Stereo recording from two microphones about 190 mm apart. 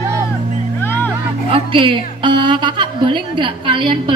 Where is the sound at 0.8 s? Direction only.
10° left (ahead or behind).